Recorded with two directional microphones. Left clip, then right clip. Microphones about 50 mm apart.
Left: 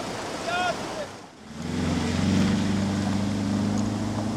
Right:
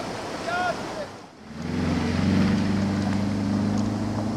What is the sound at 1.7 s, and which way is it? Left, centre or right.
Vehicle, centre.